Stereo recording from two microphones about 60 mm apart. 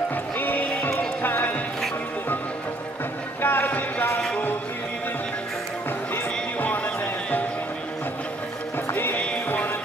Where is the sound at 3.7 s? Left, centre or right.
Left.